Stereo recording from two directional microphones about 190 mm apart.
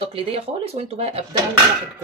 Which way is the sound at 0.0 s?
30° right (ahead or behind).